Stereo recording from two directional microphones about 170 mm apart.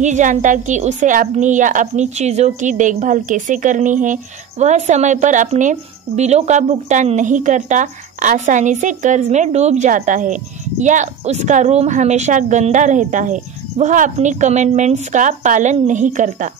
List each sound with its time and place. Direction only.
0.0 s a woman's voice: 45° right (ahead or behind)